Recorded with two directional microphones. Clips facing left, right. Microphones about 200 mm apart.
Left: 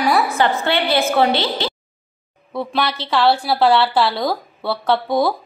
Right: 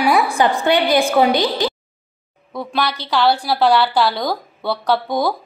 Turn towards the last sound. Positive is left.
turn(degrees=0)  # may be behind; listen again after turning